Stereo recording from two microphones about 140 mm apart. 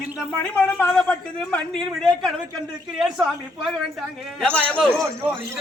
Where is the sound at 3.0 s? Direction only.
Centre (ahead or behind).